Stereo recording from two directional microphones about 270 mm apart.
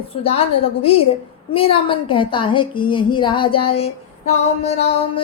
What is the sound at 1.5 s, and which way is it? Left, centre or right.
A woman's voice, centre.